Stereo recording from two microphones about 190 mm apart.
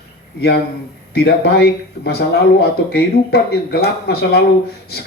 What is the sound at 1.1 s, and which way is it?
Speech, 60° left (ahead or behind).